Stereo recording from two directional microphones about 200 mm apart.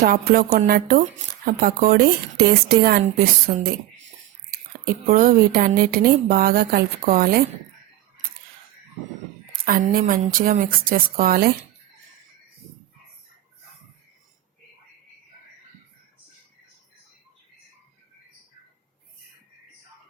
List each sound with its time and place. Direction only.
0.0 s a woman's voice: 45° right (ahead or behind)
5.0 s a woman's voice: 45° right (ahead or behind)
9.5 s a woman's voice: 45° right (ahead or behind)